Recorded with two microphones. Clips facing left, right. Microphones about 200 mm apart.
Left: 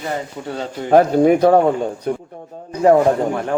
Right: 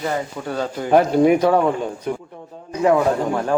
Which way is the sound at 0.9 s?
40° left (ahead or behind).